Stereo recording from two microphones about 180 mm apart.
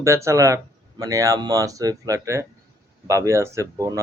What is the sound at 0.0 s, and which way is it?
A man's voice, 15° right (ahead or behind).